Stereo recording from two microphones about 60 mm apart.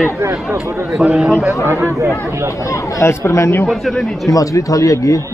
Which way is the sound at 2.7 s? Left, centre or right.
Left.